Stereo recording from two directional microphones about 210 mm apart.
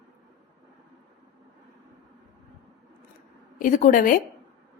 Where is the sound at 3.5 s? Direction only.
40° left (ahead or behind).